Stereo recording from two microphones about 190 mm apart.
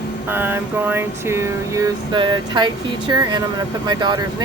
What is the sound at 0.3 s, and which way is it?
Speech, 10° right (ahead or behind).